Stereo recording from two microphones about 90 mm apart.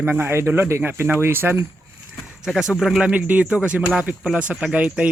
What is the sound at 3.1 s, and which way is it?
Speech, 15° right (ahead or behind).